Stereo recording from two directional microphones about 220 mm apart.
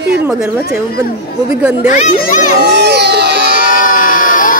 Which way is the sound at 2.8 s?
50° right (ahead or behind).